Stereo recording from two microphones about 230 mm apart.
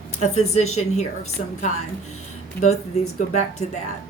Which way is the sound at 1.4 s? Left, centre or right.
Left.